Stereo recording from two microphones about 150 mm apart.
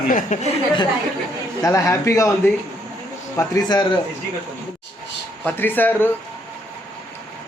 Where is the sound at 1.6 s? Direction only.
20° left (ahead or behind).